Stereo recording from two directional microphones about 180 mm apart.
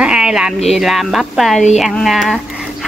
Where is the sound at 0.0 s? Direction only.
5° right (ahead or behind).